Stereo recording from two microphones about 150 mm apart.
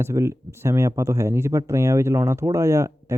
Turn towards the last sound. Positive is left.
turn(degrees=-20)  # may be behind; listen again after turning